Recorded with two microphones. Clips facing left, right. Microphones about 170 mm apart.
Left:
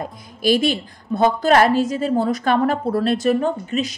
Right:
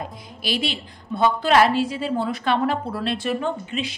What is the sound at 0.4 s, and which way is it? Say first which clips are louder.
A woman's voice: left 9 dB; 45° left (ahead or behind).